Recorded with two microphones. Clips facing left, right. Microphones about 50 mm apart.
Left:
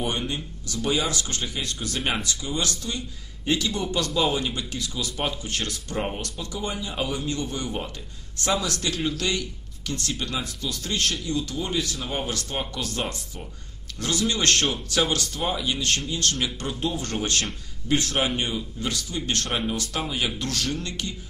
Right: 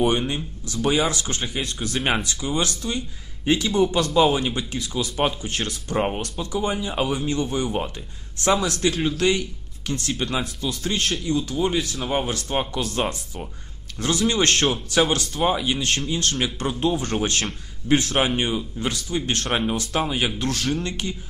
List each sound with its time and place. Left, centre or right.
0.0 s speech: right
16.3 s speech: centre
16.6 s speech: right